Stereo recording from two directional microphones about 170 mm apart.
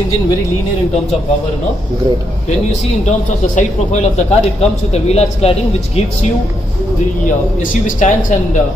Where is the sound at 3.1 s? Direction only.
45° left (ahead or behind).